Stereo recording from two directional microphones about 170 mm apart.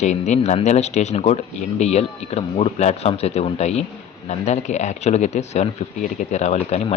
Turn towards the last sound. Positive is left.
turn(degrees=40)  # may be behind; listen again after turning